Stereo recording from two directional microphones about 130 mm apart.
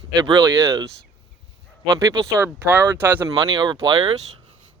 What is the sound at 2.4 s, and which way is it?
Speech, 15° right (ahead or behind).